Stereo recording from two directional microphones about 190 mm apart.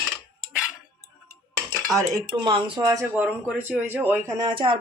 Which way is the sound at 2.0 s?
25° right (ahead or behind).